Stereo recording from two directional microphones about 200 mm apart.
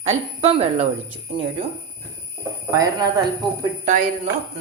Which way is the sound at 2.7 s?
15° right (ahead or behind).